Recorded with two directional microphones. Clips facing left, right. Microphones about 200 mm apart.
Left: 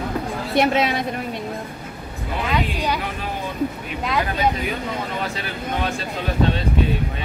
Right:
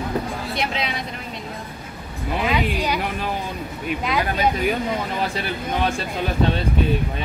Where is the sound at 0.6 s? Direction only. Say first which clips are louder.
Left 10 dB; 50° left (ahead or behind).